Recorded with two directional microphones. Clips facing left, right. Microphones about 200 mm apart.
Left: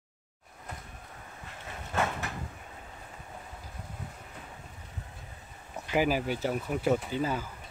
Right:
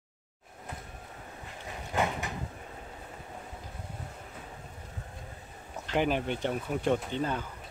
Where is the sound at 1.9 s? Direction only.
15° right (ahead or behind).